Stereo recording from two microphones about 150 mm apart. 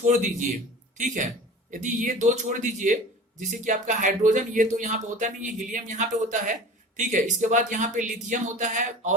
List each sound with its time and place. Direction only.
0.0 s speech: 55° right (ahead or behind)